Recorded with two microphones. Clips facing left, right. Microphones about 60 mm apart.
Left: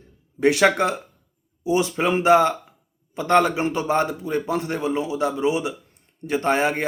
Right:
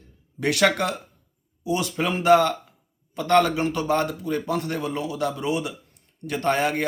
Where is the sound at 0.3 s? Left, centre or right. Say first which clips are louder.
Left 4 dB; left.